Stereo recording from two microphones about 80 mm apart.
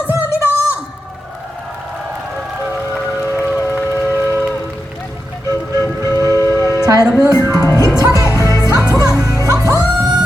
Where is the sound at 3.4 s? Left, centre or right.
Left.